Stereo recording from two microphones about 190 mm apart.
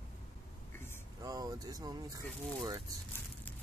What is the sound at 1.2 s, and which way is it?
Speech, 20° right (ahead or behind).